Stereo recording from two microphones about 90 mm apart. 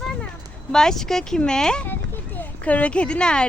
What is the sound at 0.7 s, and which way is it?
Speech, 5° left (ahead or behind).